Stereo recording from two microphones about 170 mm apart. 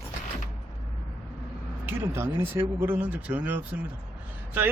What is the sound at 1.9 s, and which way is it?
Speech, 15° right (ahead or behind).